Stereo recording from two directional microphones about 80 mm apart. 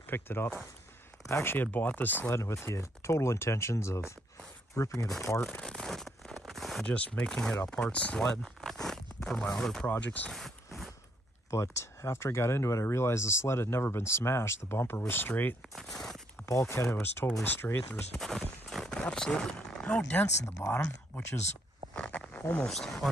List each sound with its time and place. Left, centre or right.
0.0 s speech: left
5.4 s speech: centre
5.8 s a sound: centre
6.9 s speech: centre
9.8 s speech: centre
10.3 s a sound: centre
11.5 s speech: left
15.7 s speech: centre
16.4 s speech: left
18.1 s a sound: centre
20.1 s speech: left
20.5 s speech: left
21.9 s a sound: centre
22.7 s speech: centre